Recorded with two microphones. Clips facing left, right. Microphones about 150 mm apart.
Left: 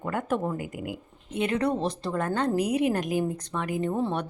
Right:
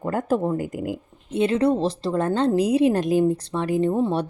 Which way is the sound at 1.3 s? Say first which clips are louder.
Right 6 dB; 25° right (ahead or behind).